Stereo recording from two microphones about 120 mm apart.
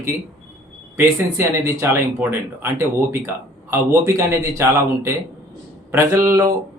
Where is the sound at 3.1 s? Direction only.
25° right (ahead or behind).